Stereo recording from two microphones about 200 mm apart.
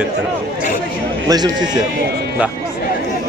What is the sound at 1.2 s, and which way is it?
Speech, 20° right (ahead or behind).